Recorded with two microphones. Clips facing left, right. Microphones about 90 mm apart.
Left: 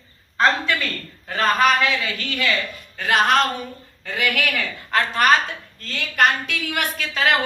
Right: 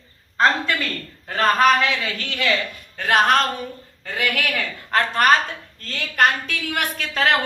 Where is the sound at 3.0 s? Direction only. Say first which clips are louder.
Right 1 dB; 50° right (ahead or behind).